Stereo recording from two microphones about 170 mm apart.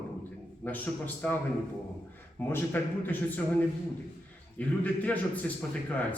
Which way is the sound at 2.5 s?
10° left (ahead or behind).